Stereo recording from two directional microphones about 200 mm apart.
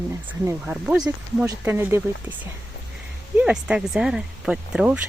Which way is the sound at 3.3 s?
5° right (ahead or behind).